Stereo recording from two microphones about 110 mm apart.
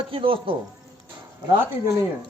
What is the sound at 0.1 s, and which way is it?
Speech, 55° right (ahead or behind).